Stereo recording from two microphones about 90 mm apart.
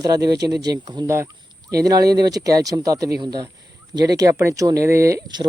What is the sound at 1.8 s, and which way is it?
Speech, 45° right (ahead or behind).